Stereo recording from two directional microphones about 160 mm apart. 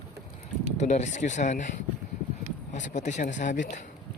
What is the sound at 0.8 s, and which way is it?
Speech, 45° left (ahead or behind).